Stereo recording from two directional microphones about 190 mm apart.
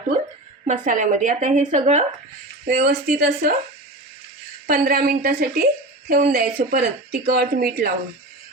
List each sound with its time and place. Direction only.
0.7 s a woman's voice: 40° right (ahead or behind)
2.6 s speech: 55° right (ahead or behind)
4.6 s a woman's voice: 50° right (ahead or behind)